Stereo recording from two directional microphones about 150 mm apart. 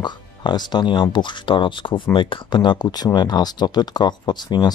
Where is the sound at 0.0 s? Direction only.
30° left (ahead or behind).